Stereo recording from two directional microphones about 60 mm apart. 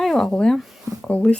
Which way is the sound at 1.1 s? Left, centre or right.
Left.